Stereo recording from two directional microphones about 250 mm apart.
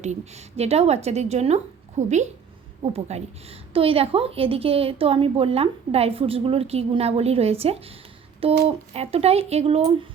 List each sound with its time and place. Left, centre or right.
0.0 s a woman's voice: right